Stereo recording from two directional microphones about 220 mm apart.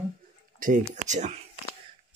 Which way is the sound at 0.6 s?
35° right (ahead or behind).